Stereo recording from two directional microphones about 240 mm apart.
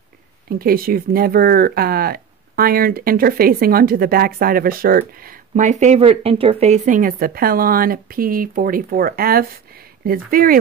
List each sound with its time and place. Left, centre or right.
0.5 s speech: right